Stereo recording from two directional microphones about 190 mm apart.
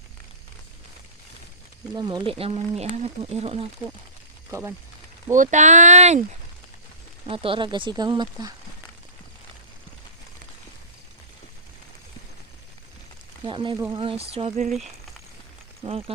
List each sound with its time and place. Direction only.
2.0 s speech: 20° right (ahead or behind)
5.3 s speech: 40° right (ahead or behind)
7.3 s speech: 25° right (ahead or behind)
13.4 s speech: 25° right (ahead or behind)
15.8 s speech: 30° right (ahead or behind)